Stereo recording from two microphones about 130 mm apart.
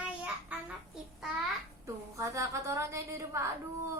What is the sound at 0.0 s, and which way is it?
Child singing, 10° right (ahead or behind).